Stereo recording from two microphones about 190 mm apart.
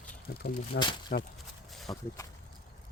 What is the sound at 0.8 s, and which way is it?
Speech, 25° left (ahead or behind).